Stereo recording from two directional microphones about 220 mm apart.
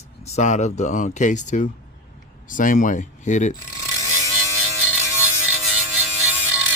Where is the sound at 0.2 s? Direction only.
30° left (ahead or behind).